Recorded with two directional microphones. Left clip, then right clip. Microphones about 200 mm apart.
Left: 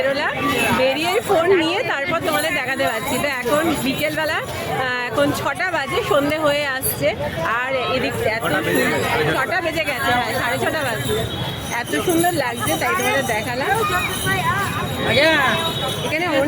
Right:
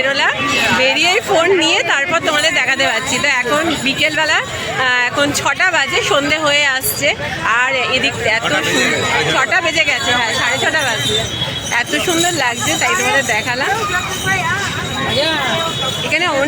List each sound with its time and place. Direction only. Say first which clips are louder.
0.0 s a man's voice: right 5 dB; 5° right (ahead or behind)
12.9 s speech: right 3 dB; 40° right (ahead or behind)
16.1 s a man's voice: right 4 dB; 5° right (ahead or behind)